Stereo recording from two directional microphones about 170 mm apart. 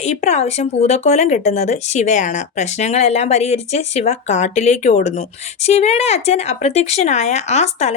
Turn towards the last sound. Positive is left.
turn(degrees=40)  # may be behind; listen again after turning